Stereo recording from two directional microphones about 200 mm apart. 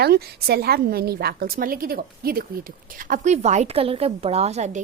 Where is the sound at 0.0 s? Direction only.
50° right (ahead or behind).